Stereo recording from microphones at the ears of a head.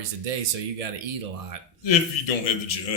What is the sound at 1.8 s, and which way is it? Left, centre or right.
A man's voice, left.